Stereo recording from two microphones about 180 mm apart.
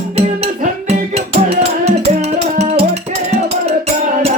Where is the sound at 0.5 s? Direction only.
40° right (ahead or behind).